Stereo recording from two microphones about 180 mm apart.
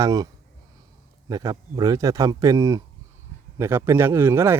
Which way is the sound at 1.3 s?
20° right (ahead or behind).